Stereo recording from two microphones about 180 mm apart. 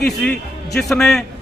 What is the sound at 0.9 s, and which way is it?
Speech, 5° left (ahead or behind).